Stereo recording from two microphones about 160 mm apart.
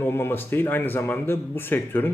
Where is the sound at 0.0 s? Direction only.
15° left (ahead or behind).